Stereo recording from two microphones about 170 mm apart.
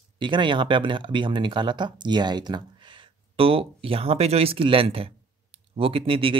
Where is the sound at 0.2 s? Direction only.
30° right (ahead or behind).